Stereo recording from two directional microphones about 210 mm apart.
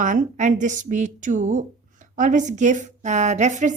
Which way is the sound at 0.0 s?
40° right (ahead or behind).